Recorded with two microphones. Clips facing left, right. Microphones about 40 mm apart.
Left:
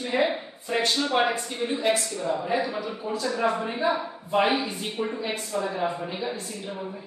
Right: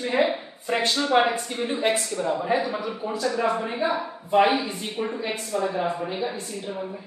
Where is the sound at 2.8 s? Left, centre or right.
Centre.